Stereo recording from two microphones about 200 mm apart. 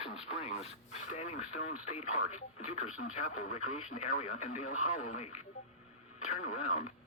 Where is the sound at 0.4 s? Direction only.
30° left (ahead or behind).